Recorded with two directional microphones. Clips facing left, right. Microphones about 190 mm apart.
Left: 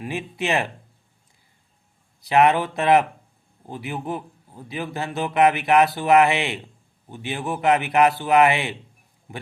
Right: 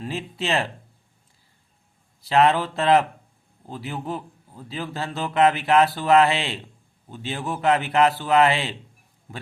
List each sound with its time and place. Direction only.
0.0 s a man's voice: 15° left (ahead or behind)
2.2 s a man's voice: 15° left (ahead or behind)